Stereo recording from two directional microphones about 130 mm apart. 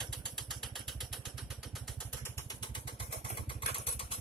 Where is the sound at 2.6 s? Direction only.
35° left (ahead or behind).